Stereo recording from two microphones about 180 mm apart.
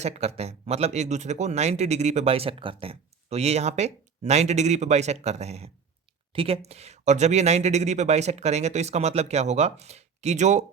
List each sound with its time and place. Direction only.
0.0 s speech: 35° right (ahead or behind)